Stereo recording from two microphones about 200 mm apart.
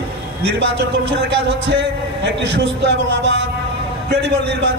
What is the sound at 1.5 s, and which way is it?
A man's voice, 60° right (ahead or behind).